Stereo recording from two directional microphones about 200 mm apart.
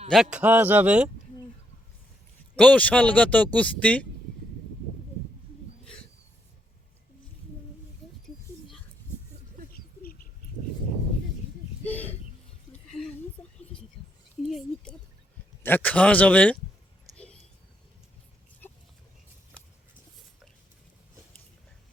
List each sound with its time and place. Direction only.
0.1 s a man's voice: 5° right (ahead or behind)
2.6 s speech: 5° left (ahead or behind)
5.8 s wild animals: 5° left (ahead or behind)
9.7 s bird: 45° left (ahead or behind)
11.9 s a sound: 10° left (ahead or behind)
14.0 s a sound: 25° left (ahead or behind)
15.6 s speech: 10° left (ahead or behind)